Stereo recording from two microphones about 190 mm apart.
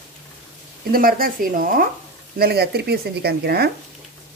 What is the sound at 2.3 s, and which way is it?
Speech, 55° right (ahead or behind).